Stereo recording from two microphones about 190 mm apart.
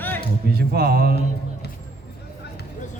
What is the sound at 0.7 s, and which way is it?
Speech, 55° right (ahead or behind).